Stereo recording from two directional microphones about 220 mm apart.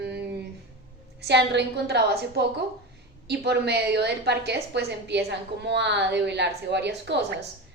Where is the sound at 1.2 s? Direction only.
50° right (ahead or behind).